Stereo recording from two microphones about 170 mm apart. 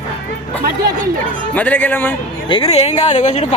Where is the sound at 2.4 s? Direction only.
30° left (ahead or behind).